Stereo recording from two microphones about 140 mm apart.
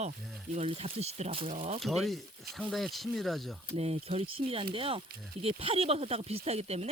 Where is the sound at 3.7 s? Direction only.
45° right (ahead or behind).